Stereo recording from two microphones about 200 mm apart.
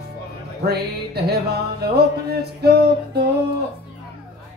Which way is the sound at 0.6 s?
55° right (ahead or behind).